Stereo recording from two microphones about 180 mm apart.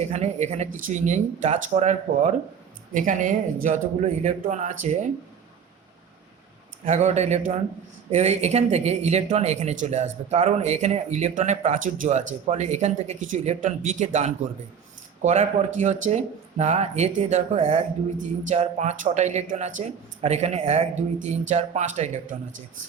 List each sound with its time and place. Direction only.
0.0 s speech: 40° right (ahead or behind)
6.8 s speech: 40° right (ahead or behind)